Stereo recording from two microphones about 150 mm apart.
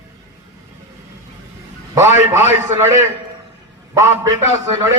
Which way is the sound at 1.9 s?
15° right (ahead or behind).